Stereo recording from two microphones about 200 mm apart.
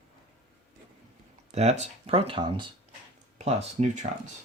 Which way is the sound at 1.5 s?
35° right (ahead or behind).